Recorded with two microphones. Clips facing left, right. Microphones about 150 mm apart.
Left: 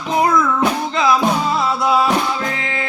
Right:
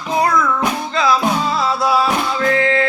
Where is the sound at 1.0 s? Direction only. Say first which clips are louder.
Even; 20° left (ahead or behind).